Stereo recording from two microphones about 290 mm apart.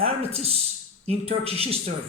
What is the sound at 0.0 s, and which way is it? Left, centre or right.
Speech, right.